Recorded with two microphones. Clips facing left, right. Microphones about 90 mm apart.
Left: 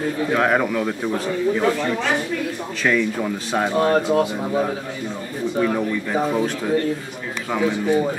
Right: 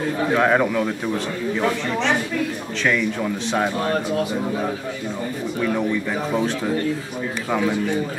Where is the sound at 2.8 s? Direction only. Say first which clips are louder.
Left 1 dB; 5° left (ahead or behind).